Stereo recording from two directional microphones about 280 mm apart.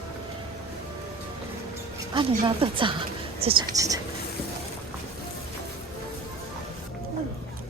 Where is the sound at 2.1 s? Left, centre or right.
Centre.